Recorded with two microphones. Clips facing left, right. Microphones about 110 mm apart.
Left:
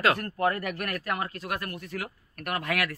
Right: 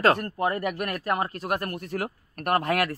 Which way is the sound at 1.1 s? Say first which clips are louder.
Right 7 dB; 35° right (ahead or behind).